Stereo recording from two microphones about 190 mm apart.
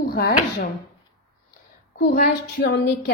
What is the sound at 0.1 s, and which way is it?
Speech, 55° left (ahead or behind).